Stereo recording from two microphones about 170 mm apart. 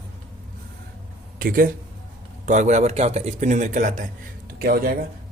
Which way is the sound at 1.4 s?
60° right (ahead or behind).